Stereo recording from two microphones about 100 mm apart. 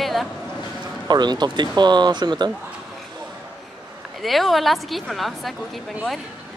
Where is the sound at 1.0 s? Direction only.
45° right (ahead or behind).